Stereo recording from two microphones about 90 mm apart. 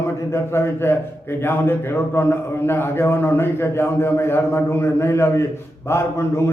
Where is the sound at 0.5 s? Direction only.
25° left (ahead or behind).